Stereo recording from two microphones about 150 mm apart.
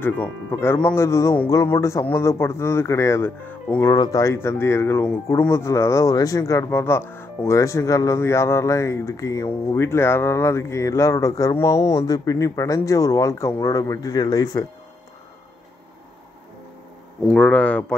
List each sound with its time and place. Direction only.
0.0 s speech: 15° left (ahead or behind)
3.8 s speech: 25° left (ahead or behind)
17.3 s speech: 10° left (ahead or behind)